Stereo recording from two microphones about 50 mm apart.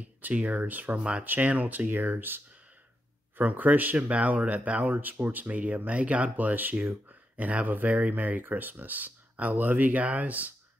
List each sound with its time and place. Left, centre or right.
0.3 s speech: right
0.9 s speech: right
1.2 s speech: right
4.9 s speech: right